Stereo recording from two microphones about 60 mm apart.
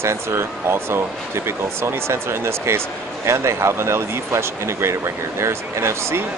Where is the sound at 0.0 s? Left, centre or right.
Right.